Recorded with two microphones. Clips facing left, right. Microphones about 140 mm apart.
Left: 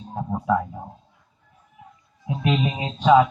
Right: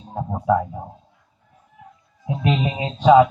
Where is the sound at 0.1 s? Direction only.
20° right (ahead or behind).